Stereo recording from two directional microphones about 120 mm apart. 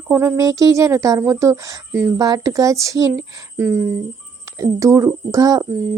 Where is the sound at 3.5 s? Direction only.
15° right (ahead or behind).